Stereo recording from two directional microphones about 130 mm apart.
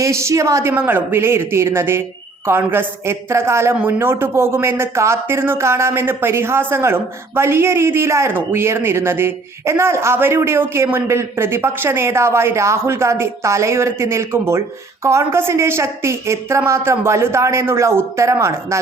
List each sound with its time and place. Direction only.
0.0 s speech: 20° right (ahead or behind)